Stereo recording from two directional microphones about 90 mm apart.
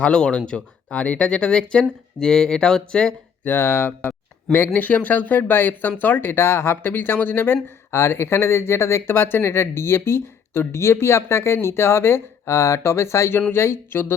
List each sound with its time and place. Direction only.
0.0 s speech: 10° left (ahead or behind)
3.4 s speech: 25° left (ahead or behind)